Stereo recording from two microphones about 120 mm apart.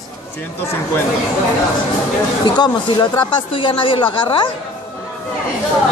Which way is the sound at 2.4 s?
40° left (ahead or behind).